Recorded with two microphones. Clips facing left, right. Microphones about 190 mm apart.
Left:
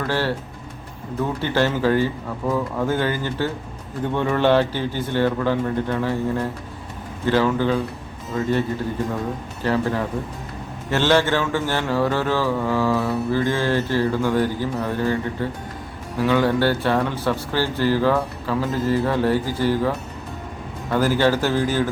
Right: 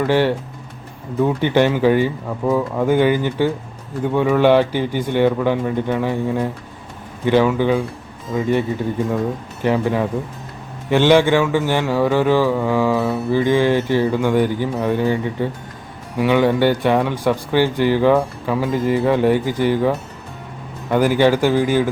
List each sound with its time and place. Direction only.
0.0 s speech: 15° right (ahead or behind)
1.4 s speech: 15° right (ahead or behind)
9.6 s speech: 15° right (ahead or behind)
20.9 s speech: 15° right (ahead or behind)